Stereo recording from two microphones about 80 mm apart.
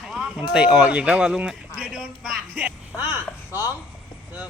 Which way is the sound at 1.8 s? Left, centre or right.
Centre.